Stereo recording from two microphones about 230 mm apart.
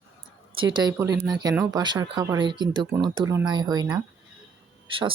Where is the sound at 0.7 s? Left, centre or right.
Centre.